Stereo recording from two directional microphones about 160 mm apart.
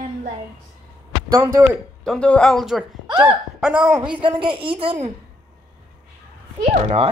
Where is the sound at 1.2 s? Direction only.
20° right (ahead or behind).